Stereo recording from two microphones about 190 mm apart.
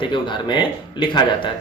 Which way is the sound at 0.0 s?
25° left (ahead or behind).